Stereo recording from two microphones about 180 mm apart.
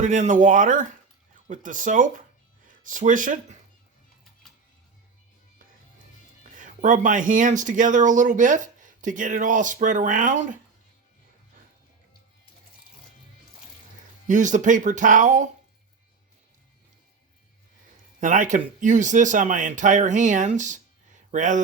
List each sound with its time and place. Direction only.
0.0 s speech: 45° right (ahead or behind)
6.5 s speech: 45° right (ahead or behind)
14.3 s speech: 45° right (ahead or behind)
18.2 s speech: 45° right (ahead or behind)